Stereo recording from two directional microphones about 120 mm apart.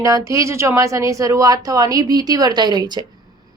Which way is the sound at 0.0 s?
25° right (ahead or behind).